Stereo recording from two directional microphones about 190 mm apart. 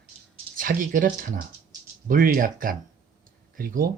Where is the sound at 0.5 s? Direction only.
45° right (ahead or behind).